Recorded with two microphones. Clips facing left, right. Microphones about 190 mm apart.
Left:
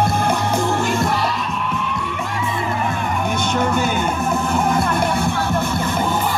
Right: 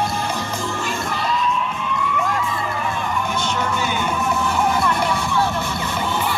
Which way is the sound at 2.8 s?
55° left (ahead or behind).